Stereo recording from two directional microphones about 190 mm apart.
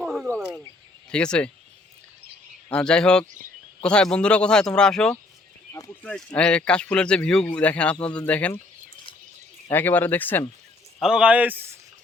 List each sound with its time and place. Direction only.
0.0 s wild animals: centre (ahead or behind)
1.1 s speech: 5° left (ahead or behind)
2.6 s speech: 5° left (ahead or behind)
5.7 s a sound: 15° left (ahead or behind)
6.1 s speech: 5° left (ahead or behind)
9.6 s speech: 10° left (ahead or behind)
11.0 s speech: 5° right (ahead or behind)